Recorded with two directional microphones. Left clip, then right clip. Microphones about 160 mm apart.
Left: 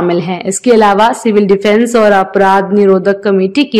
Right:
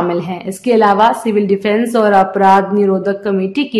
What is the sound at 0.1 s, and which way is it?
A woman's voice, 35° left (ahead or behind).